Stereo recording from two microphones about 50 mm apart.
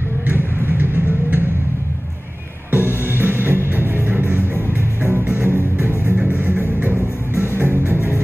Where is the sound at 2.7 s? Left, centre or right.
Right.